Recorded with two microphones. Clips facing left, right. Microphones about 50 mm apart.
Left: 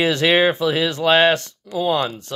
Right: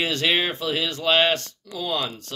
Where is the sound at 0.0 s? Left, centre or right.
Left.